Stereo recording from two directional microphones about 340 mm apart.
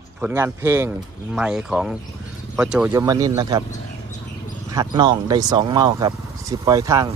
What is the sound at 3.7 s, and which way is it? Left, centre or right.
Bird, left.